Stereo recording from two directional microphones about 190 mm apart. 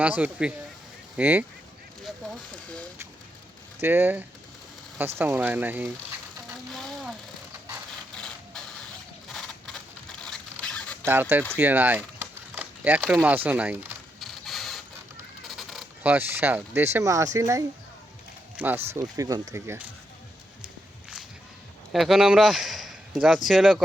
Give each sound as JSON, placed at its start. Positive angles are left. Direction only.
{"t": 0.0, "sound": "speech", "side_deg": -10}
{"t": 3.8, "sound": "speech", "side_deg": -10}
{"t": 6.5, "sound": "a sound", "side_deg": 0}
{"t": 11.0, "sound": "speech", "side_deg": -10}
{"t": 11.5, "sound": "a sound", "side_deg": -10}
{"t": 13.2, "sound": "speech", "side_deg": -10}
{"t": 14.2, "sound": "printer", "side_deg": 0}
{"t": 15.4, "sound": "a sound", "side_deg": 0}
{"t": 16.1, "sound": "speech", "side_deg": -10}
{"t": 21.9, "sound": "a man's voice", "side_deg": 0}